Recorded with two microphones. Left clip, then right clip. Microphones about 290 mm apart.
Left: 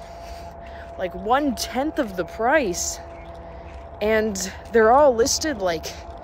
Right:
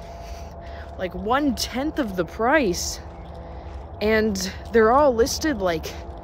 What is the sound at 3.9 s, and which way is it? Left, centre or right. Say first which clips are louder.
Speech: even; centre.